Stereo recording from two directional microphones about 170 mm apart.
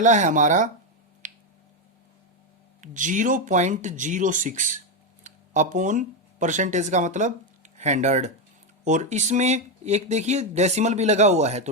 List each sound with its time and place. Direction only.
0.0 s speech: 45° right (ahead or behind)
1.2 s finger snapping: 50° right (ahead or behind)
2.8 s speech: 50° right (ahead or behind)